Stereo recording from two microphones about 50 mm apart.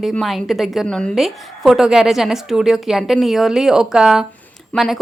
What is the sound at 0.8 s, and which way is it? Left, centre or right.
Speech, left.